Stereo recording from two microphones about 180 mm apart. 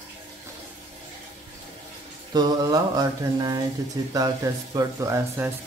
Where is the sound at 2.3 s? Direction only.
20° right (ahead or behind).